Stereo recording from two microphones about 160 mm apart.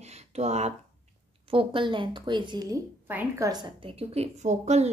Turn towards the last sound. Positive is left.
turn(degrees=-45)  # may be behind; listen again after turning